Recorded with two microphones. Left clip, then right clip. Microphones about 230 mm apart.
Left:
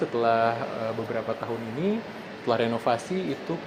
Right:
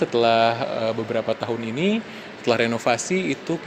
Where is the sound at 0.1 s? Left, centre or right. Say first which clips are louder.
Right 5 dB; right.